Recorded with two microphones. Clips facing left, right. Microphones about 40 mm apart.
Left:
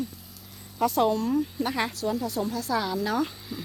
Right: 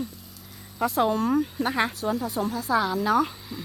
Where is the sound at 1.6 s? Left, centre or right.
Centre.